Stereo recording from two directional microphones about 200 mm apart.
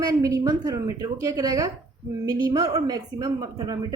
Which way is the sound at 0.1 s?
15° right (ahead or behind).